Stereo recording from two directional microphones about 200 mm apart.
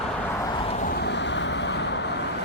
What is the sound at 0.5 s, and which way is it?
Vehicle, 30° left (ahead or behind).